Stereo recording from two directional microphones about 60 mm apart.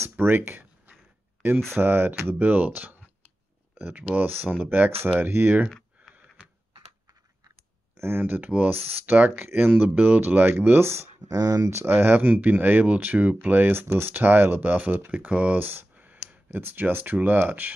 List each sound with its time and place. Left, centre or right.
0.0 s a sound: right
1.8 s speech: right
5.7 s a sound: centre
8.0 s speech: right
11.2 s speech: right
11.7 s speech: right